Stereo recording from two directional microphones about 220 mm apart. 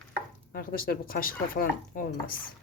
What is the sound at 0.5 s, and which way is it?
Speech, 40° left (ahead or behind).